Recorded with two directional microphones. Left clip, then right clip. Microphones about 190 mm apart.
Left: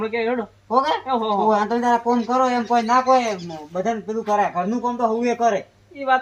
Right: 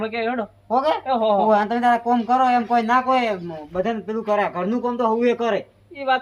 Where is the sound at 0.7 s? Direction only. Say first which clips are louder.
Left 1 dB; centre (ahead or behind).